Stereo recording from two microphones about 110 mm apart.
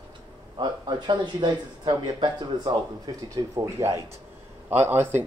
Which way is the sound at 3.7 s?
25° right (ahead or behind).